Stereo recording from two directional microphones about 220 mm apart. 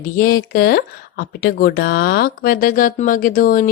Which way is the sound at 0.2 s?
40° left (ahead or behind).